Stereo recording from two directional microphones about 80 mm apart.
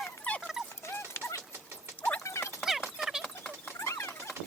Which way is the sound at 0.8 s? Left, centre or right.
Left.